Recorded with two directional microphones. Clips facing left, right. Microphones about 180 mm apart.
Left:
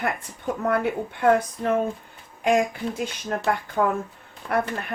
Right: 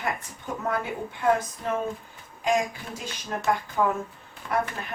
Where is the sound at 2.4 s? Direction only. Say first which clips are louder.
Left 4 dB; 60° left (ahead or behind).